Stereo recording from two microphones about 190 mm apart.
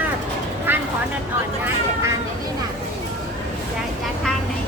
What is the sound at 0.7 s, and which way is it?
Vehicle, 10° right (ahead or behind).